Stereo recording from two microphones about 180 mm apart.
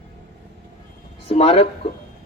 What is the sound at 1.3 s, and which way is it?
Speech, 35° left (ahead or behind).